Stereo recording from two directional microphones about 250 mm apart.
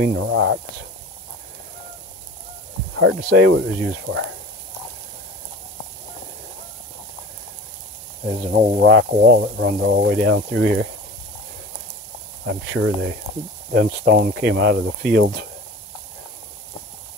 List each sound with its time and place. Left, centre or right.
0.0 s speech: right
3.0 s speech: right
8.3 s speech: right
12.4 s speech: right